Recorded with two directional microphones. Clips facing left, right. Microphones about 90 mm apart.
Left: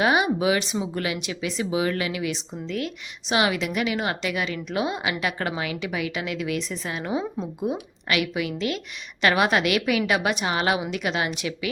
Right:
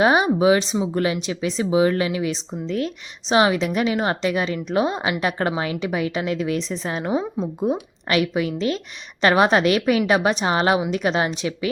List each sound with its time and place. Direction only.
0.0 s a woman's voice: 30° right (ahead or behind)